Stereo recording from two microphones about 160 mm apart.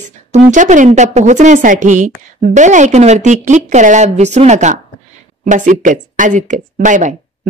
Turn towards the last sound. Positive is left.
turn(degrees=-50)  # may be behind; listen again after turning